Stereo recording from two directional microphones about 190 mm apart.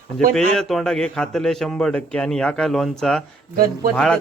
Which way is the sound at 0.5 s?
Centre (ahead or behind).